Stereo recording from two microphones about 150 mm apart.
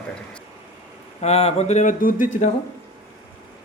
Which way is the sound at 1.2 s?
45° left (ahead or behind).